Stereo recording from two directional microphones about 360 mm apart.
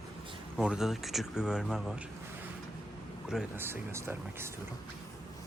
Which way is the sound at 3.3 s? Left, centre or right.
Centre.